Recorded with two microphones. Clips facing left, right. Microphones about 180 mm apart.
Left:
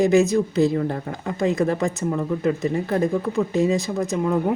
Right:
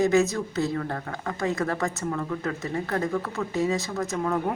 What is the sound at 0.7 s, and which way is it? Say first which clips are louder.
Speech: left 6 dB; 20° left (ahead or behind).